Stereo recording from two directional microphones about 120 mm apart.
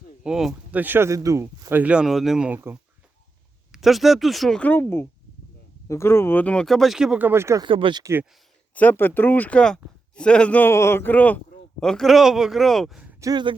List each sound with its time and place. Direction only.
0.3 s speech: 5° right (ahead or behind); by 1.8 s 25° right (ahead or behind)
1.8 s speech: 10° right (ahead or behind)
3.7 s speech: centre (ahead or behind)
4.6 s speech: 20° left (ahead or behind); by 7.6 s 20° right (ahead or behind)
7.6 s speech: 45° right (ahead or behind)
8.7 s speech: 15° left (ahead or behind); by 13.1 s centre (ahead or behind)
13.1 s speech: 30° right (ahead or behind)